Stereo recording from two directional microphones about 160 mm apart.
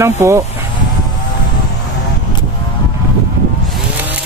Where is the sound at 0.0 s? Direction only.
20° right (ahead or behind).